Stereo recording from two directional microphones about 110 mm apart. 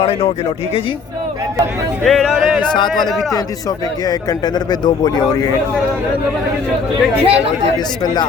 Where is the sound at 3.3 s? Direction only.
35° left (ahead or behind).